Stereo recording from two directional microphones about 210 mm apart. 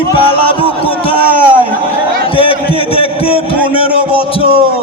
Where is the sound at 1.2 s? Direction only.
25° left (ahead or behind).